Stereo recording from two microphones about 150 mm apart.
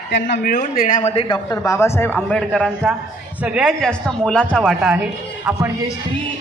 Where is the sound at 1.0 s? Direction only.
40° left (ahead or behind).